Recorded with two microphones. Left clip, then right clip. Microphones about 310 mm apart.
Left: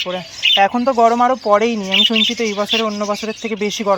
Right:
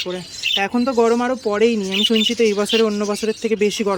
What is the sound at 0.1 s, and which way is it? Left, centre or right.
Speech, centre.